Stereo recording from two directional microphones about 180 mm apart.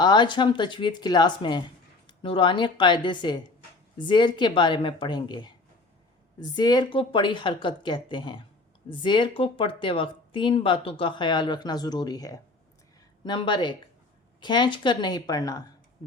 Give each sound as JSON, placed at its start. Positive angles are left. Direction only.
{"t": 0.0, "sound": "speech", "side_deg": 25}